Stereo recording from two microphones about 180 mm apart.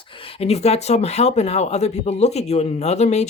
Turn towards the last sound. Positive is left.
turn(degrees=40)  # may be behind; listen again after turning